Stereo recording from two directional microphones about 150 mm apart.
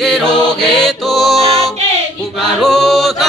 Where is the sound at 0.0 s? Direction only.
5° left (ahead or behind).